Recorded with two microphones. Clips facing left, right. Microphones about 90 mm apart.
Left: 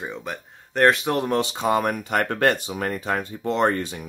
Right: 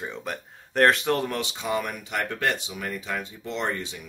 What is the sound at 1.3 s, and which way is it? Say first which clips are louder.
Speech: left 7 dB; 40° left (ahead or behind).